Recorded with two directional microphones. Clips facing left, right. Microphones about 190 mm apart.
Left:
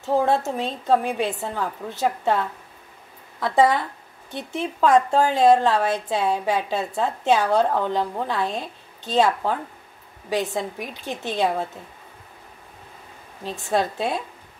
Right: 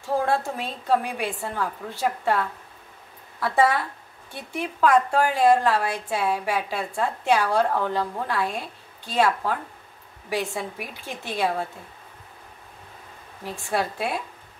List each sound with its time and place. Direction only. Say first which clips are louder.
0.0 s a woman's voice: left 3 dB; 20° left (ahead or behind)
13.4 s a woman's voice: left 3 dB; 20° left (ahead or behind)